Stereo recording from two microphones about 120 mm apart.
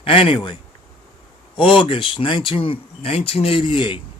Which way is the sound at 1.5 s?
45° left (ahead or behind).